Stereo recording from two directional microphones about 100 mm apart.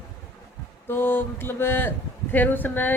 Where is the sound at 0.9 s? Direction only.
20° left (ahead or behind).